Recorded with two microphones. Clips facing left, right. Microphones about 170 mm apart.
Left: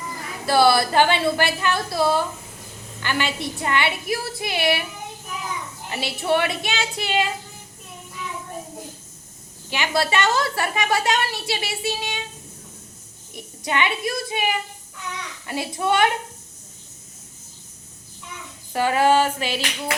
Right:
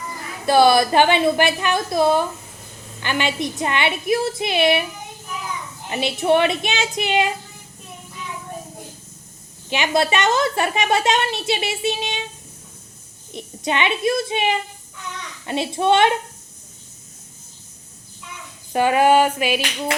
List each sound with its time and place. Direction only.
0.4 s a woman's voice: 20° right (ahead or behind)
5.9 s a woman's voice: 20° right (ahead or behind)
9.6 s a woman's voice: 20° right (ahead or behind)
13.3 s a woman's voice: 20° right (ahead or behind)
18.7 s a sound: 20° right (ahead or behind)